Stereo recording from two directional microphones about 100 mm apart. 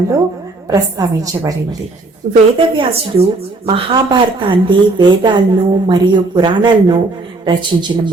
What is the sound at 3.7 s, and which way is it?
A woman's voice, 55° right (ahead or behind).